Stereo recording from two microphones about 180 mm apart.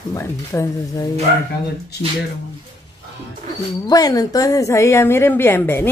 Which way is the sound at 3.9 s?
20° left (ahead or behind).